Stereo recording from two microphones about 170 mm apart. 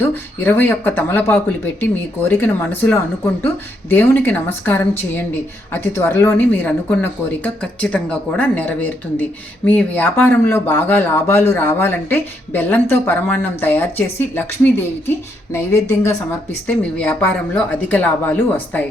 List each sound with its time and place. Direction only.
0.0 s speech: 10° left (ahead or behind)